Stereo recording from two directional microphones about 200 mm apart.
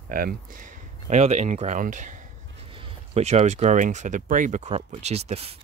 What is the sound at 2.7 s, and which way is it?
Speech, 30° right (ahead or behind).